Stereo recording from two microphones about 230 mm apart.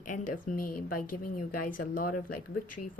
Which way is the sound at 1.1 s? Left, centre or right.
Left.